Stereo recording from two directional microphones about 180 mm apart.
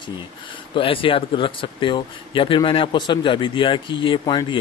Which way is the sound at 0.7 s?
30° left (ahead or behind).